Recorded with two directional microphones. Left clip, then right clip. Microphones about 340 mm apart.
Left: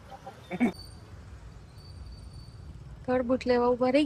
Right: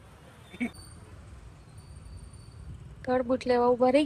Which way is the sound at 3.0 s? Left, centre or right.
Centre.